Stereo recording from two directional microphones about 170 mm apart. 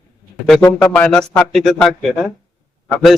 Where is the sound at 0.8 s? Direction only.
10° left (ahead or behind).